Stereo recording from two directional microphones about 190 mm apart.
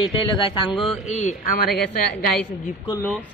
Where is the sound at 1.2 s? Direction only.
45° left (ahead or behind).